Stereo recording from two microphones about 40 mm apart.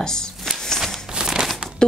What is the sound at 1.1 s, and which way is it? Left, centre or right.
Crumpling, centre.